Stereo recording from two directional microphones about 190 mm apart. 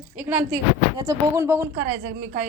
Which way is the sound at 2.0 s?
55° right (ahead or behind).